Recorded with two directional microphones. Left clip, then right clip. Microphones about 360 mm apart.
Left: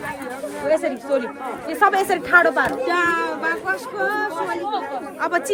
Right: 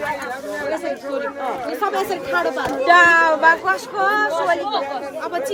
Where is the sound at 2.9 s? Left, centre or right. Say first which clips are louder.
Right 8 dB; right.